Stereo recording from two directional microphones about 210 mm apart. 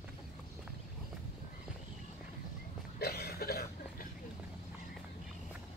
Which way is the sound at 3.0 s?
50° left (ahead or behind).